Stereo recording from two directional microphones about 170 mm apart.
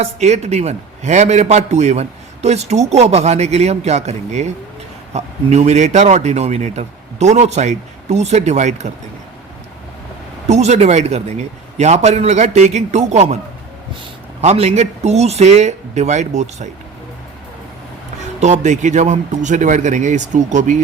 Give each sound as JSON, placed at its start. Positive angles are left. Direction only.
{"t": 0.0, "sound": "a man's voice", "side_deg": -40}
{"t": 10.5, "sound": "a man's voice", "side_deg": -40}
{"t": 14.4, "sound": "a man's voice", "side_deg": -40}
{"t": 18.2, "sound": "a man's voice", "side_deg": -45}